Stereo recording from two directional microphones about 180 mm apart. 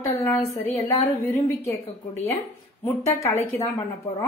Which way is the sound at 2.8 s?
15° left (ahead or behind).